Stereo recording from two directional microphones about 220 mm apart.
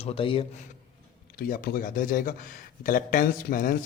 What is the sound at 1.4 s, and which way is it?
A man's voice, 40° left (ahead or behind).